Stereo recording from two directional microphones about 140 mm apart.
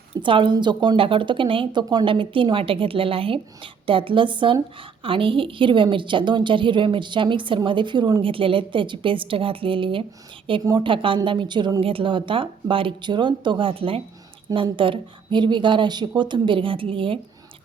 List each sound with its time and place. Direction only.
0.2 s a woman's voice: 35° right (ahead or behind)